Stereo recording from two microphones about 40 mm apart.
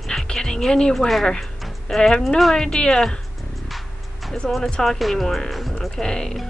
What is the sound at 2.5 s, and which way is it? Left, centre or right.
Speech, centre.